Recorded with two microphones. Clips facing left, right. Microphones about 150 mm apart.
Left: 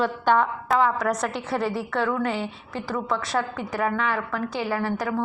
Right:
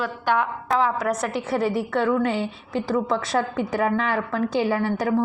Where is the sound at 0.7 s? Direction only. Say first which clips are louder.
Even; 5° right (ahead or behind); by 4.6 s 25° right (ahead or behind).